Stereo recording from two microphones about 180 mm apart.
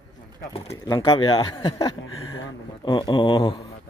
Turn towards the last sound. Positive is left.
turn(degrees=25)  # may be behind; listen again after turning